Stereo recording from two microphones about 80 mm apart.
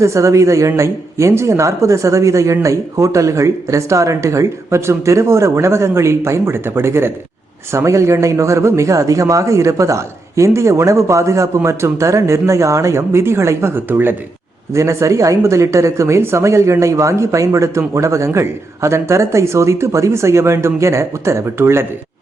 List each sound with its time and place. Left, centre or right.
0.0 s speech: right
14.7 s speech: right